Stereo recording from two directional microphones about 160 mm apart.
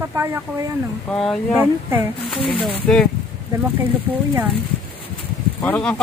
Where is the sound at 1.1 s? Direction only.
5° left (ahead or behind).